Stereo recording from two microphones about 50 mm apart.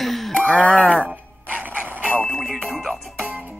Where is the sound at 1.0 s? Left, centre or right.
Right.